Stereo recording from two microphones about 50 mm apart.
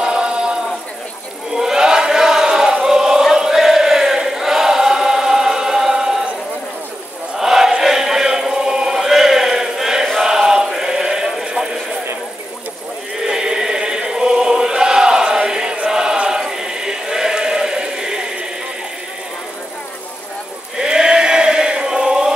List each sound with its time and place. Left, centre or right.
0.0 s chant: centre
1.5 s crowd: centre
7.3 s chant: centre
11.4 s vehicle: centre
13.2 s choir: centre
20.8 s chant: centre